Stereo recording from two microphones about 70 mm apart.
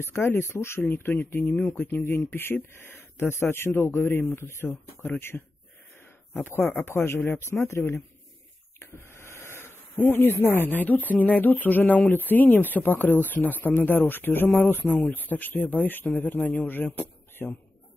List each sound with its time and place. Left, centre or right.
0.0 s speech: left
5.3 s speech: centre
6.4 s speech: left
9.1 s speech: left